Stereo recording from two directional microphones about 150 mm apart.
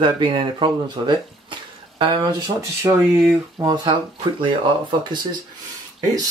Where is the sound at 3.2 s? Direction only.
25° right (ahead or behind).